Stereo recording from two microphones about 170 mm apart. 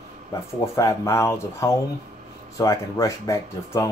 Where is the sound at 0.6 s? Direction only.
15° left (ahead or behind).